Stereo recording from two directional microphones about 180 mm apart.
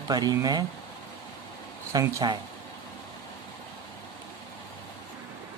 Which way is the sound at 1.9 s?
20° right (ahead or behind).